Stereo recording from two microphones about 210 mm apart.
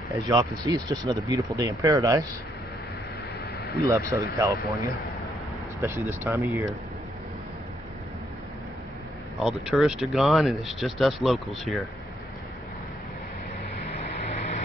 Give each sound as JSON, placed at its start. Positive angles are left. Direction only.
{"t": 0.1, "sound": "speech", "side_deg": -15}
{"t": 3.8, "sound": "speech", "side_deg": -15}
{"t": 5.8, "sound": "speech", "side_deg": -10}
{"t": 9.4, "sound": "speech", "side_deg": 0}
{"t": 14.2, "sound": "vehicle", "side_deg": 35}